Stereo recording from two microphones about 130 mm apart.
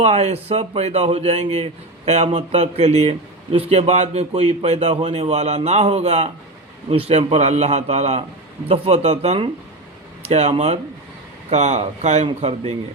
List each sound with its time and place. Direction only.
0.0 s a man's voice: 55° right (ahead or behind)
8.6 s a man's voice: 50° right (ahead or behind)
11.5 s a man's voice: 60° right (ahead or behind)